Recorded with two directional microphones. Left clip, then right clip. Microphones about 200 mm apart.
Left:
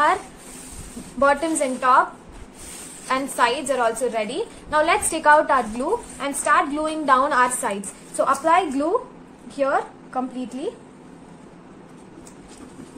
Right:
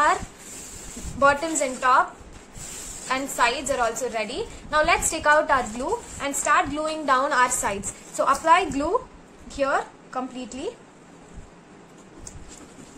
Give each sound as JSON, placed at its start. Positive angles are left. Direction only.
{"t": 1.2, "sound": "a woman's voice", "side_deg": 0}
{"t": 3.1, "sound": "a woman's voice", "side_deg": 5}